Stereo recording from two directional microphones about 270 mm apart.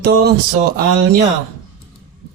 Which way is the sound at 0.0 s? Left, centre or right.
Right.